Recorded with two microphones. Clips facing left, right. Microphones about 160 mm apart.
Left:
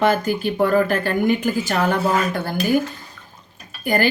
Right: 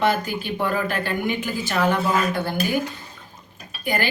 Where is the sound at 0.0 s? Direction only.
45° left (ahead or behind).